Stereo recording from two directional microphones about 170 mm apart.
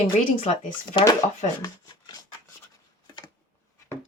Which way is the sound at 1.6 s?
20° left (ahead or behind).